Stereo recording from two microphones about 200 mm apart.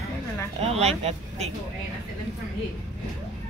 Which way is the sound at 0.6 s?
30° right (ahead or behind).